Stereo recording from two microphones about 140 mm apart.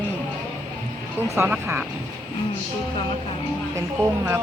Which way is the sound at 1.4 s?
15° right (ahead or behind).